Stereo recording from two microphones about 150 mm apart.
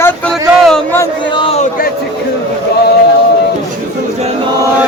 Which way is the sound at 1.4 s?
45° left (ahead or behind).